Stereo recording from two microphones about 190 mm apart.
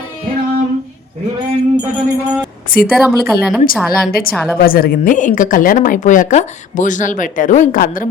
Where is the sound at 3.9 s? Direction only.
50° left (ahead or behind).